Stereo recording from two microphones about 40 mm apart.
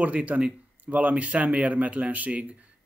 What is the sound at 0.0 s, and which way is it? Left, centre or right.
Speech, right.